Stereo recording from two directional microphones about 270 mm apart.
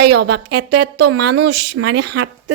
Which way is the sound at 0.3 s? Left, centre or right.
Right.